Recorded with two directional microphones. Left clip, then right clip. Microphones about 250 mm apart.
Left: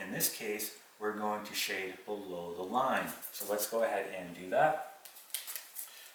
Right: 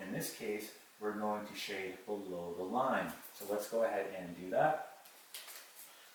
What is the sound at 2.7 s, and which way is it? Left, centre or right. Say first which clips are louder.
Speech: left 3 dB; centre.